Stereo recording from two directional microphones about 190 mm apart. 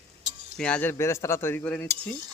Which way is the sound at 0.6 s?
10° left (ahead or behind).